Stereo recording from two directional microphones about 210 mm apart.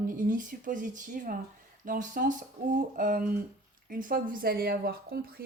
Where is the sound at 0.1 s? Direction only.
40° right (ahead or behind).